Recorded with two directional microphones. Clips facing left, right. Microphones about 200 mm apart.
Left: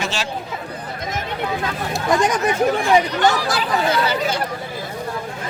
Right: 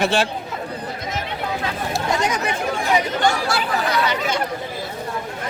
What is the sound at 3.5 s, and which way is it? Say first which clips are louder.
Speech: left 2 dB; 30° left (ahead or behind).